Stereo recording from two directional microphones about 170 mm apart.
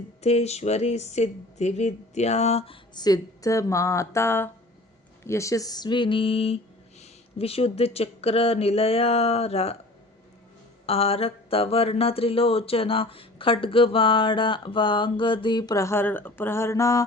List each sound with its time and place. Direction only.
0.2 s mantra: 40° left (ahead or behind)
2.9 s speech: 25° left (ahead or behind)
7.0 s mantra: 35° left (ahead or behind)
10.8 s mantra: 35° left (ahead or behind); by 17.0 s 20° left (ahead or behind)